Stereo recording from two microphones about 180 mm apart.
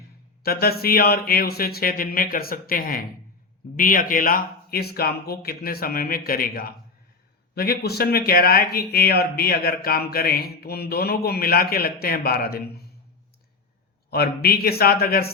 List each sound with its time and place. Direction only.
0.4 s speech: 60° left (ahead or behind)
14.1 s speech: 60° left (ahead or behind)